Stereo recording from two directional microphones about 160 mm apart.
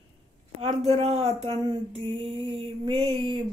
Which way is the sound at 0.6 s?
40° right (ahead or behind).